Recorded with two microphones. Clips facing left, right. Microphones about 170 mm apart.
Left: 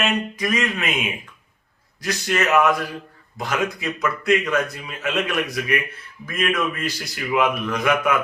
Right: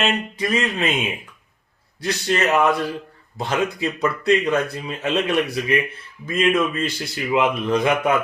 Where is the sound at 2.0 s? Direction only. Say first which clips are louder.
Right 2 dB; 30° right (ahead or behind).